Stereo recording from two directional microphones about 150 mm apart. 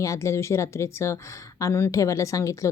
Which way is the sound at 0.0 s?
20° left (ahead or behind).